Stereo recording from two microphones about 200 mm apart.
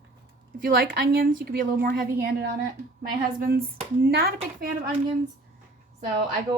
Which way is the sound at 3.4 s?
45° right (ahead or behind).